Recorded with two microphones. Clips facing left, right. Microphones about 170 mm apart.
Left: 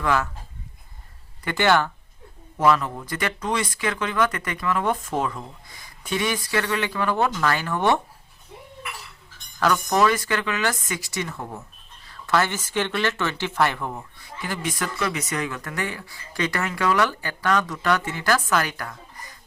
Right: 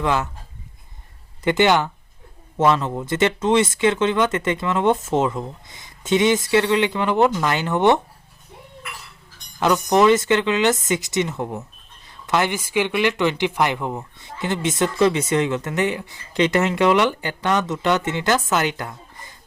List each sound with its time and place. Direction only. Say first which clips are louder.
0.0 s speech: right 2 dB; 20° right (ahead or behind)
1.5 s speech: right 3 dB; 20° right (ahead or behind)
9.6 s speech: right 4 dB; 20° right (ahead or behind)